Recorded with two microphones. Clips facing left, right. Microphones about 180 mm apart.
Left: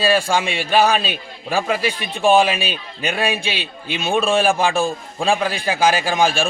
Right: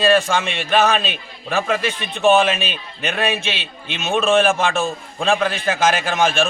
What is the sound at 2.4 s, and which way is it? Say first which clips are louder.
A man's voice: left 1 dB; 10° left (ahead or behind).